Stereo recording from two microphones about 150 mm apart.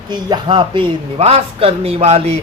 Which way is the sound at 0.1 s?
30° right (ahead or behind).